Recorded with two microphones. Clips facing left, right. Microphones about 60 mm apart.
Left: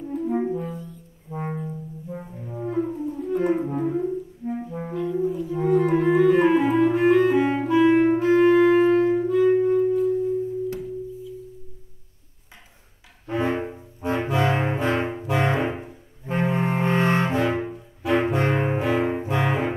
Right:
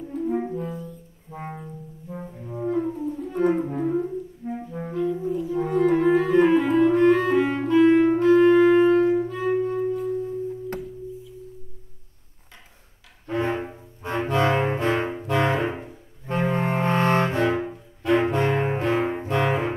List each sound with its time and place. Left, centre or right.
0.0 s brass instrument: centre
8.2 s music: centre
13.3 s brass instrument: centre
19.1 s music: centre